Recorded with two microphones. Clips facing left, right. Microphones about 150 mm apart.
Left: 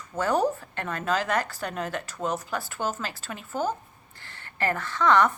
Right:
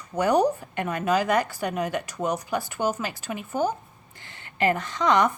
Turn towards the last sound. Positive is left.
turn(degrees=-15)  # may be behind; listen again after turning